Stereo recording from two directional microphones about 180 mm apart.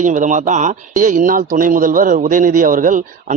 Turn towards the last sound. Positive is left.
turn(degrees=-45)  # may be behind; listen again after turning